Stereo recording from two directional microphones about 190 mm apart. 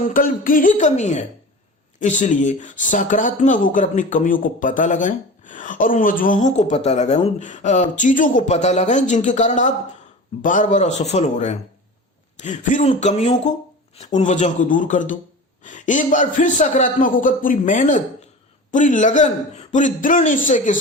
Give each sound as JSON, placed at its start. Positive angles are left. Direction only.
{"t": 0.0, "sound": "a woman's voice", "side_deg": 45}